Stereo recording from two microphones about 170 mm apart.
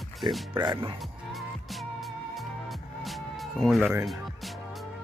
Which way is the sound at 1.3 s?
Centre (ahead or behind).